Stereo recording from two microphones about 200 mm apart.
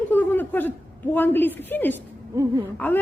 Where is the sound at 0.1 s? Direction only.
10° left (ahead or behind).